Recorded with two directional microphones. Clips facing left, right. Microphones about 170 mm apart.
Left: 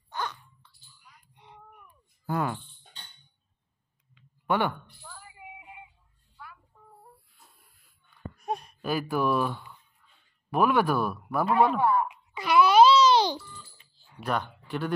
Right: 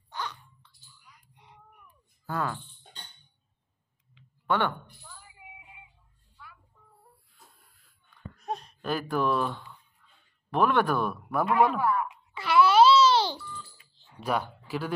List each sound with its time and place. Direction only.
2.2 s speech: 15° left (ahead or behind)
4.5 s speech: 10° left (ahead or behind)
5.0 s a sound: 60° left (ahead or behind)
8.4 s baby cry: 10° left (ahead or behind)
10.5 s speech: 10° left (ahead or behind)
11.8 s speech: 30° left (ahead or behind)
12.1 s babbling: 15° left (ahead or behind)
14.2 s speech: 10° right (ahead or behind)